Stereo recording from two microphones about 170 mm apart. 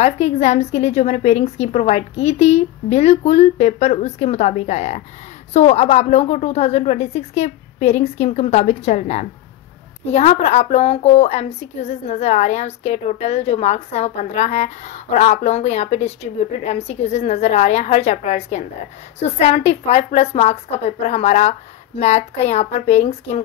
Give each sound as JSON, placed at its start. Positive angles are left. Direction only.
{"t": 0.0, "sound": "a woman's voice", "side_deg": 40}